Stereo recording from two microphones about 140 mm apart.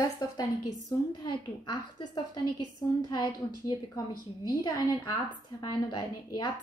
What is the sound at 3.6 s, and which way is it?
A woman's voice, 30° left (ahead or behind).